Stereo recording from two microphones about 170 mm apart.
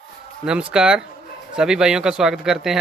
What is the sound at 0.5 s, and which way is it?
Speech, 5° right (ahead or behind).